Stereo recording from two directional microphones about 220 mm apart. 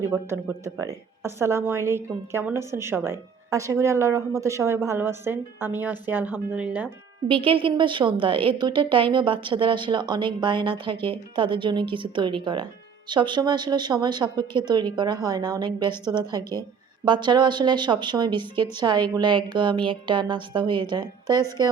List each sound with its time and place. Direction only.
0.1 s speech: 10° right (ahead or behind)
7.3 s a woman's voice: 25° right (ahead or behind)